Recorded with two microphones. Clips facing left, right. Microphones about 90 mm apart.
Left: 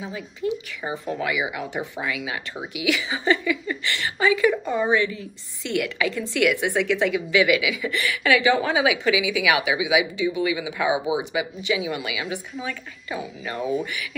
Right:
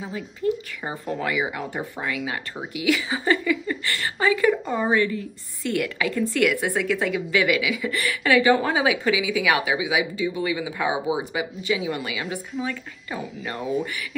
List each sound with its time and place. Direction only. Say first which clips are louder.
0.0 s a woman's voice: right 2 dB; 45° right (ahead or behind)
10.9 s speech: left 2 dB; 15° left (ahead or behind)
11.3 s a woman's voice: left 1 dB; 40° right (ahead or behind)